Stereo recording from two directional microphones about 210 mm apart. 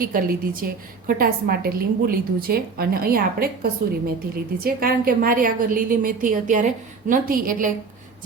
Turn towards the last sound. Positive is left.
turn(degrees=-40)  # may be behind; listen again after turning